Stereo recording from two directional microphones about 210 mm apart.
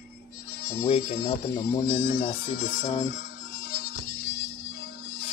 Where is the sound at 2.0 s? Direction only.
45° left (ahead or behind).